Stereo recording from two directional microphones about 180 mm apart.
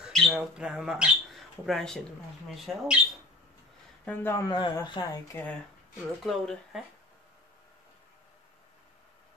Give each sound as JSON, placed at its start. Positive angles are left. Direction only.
{"t": 0.0, "sound": "speech", "side_deg": 0}
{"t": 4.0, "sound": "a man's voice", "side_deg": 10}
{"t": 4.6, "sound": "speech", "side_deg": 25}
{"t": 6.2, "sound": "speech", "side_deg": 0}